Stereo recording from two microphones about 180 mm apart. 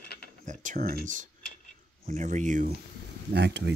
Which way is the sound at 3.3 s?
70° right (ahead or behind).